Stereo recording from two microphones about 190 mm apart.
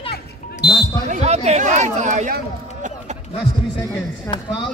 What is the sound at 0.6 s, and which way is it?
Basketball bounce, 60° left (ahead or behind).